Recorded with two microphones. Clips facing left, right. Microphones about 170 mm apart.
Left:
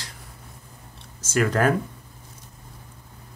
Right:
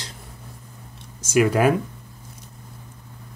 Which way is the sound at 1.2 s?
15° right (ahead or behind).